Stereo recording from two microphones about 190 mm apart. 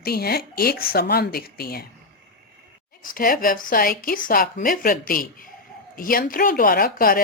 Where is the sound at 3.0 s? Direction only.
50° left (ahead or behind).